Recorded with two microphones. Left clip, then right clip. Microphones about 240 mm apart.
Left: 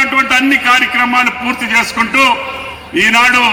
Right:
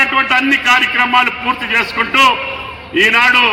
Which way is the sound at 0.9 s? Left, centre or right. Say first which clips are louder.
Even; left.